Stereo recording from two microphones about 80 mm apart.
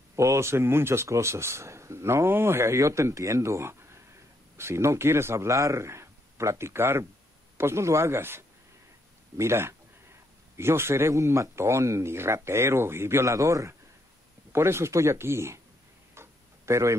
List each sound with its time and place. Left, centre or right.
0.1 s speech: right
16.2 s tick-tock: right